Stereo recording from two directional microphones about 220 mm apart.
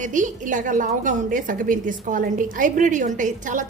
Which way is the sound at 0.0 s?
35° right (ahead or behind).